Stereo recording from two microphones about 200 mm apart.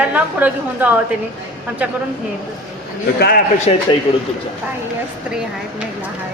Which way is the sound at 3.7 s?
30° left (ahead or behind).